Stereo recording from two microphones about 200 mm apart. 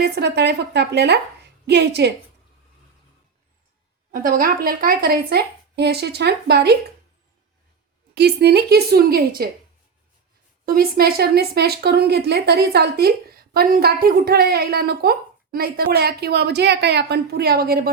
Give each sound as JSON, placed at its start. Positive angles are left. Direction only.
{"t": 0.0, "sound": "a woman's voice", "side_deg": -55}
{"t": 4.1, "sound": "speech", "side_deg": -45}
{"t": 8.1, "sound": "speech", "side_deg": -55}
{"t": 10.7, "sound": "speech", "side_deg": -50}